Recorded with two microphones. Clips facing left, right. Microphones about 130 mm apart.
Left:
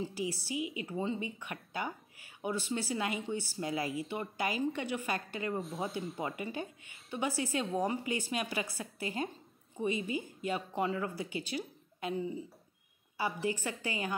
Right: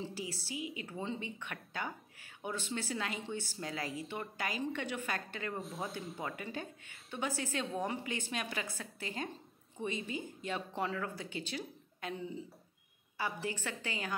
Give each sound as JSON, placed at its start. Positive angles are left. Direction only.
{"t": 0.0, "sound": "speech", "side_deg": 10}
{"t": 13.5, "sound": "speech", "side_deg": 10}